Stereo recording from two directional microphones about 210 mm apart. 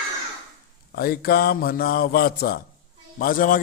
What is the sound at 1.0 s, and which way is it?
A man's voice, 45° left (ahead or behind).